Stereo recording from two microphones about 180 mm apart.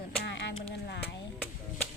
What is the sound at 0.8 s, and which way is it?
Speech, 60° left (ahead or behind).